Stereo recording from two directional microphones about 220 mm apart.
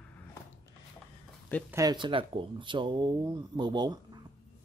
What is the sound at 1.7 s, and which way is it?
Speech, 15° right (ahead or behind).